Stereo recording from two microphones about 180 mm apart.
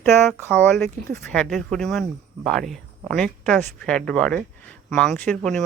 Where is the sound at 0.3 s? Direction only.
10° left (ahead or behind).